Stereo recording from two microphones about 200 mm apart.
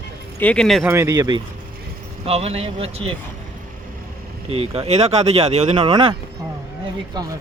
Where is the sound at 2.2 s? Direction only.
30° right (ahead or behind).